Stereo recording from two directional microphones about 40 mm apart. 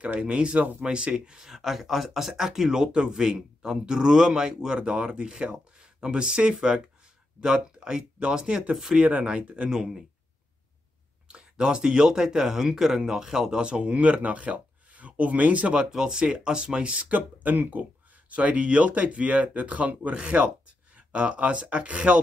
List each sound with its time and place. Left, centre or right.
0.2 s speech: right
1.4 s speech: centre
8.7 s speech: centre
9.4 s speech: right
9.7 s speech: centre
11.2 s speech: right
13.9 s speech: right
15.9 s speech: centre
17.0 s speech: right
18.3 s speech: right